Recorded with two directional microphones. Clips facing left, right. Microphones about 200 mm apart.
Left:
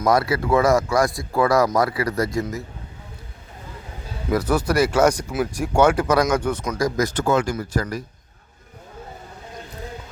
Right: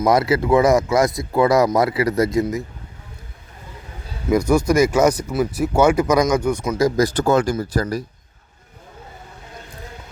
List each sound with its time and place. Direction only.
0.0 s speech: 20° right (ahead or behind)
4.3 s speech: 10° right (ahead or behind)
6.7 s speech: 30° right (ahead or behind)